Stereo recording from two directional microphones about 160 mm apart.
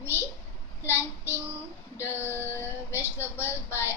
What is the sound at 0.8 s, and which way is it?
Child singing, 10° right (ahead or behind).